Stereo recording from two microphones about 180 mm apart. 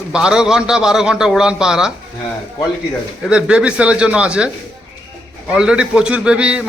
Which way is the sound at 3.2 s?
5° right (ahead or behind).